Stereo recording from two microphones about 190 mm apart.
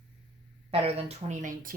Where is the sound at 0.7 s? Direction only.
35° right (ahead or behind).